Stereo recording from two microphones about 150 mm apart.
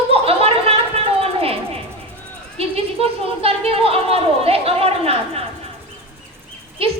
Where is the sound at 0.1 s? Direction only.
40° right (ahead or behind).